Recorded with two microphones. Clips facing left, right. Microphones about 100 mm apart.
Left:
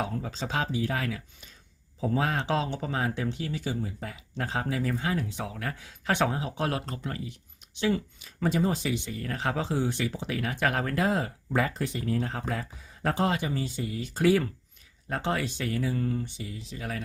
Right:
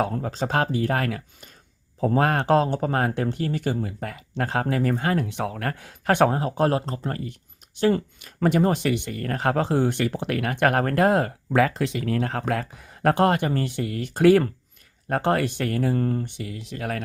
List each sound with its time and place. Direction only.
0.0 s speech: 50° right (ahead or behind)
6.7 s speech: 35° right (ahead or behind)
7.8 s speech: 50° right (ahead or behind)